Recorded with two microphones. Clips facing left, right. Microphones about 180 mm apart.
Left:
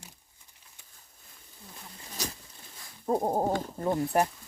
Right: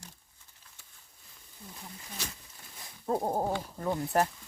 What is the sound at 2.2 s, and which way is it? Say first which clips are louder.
Speech: left 6 dB; 40° left (ahead or behind).